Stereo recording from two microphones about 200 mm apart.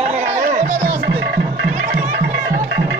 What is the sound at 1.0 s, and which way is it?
Music, 60° right (ahead or behind).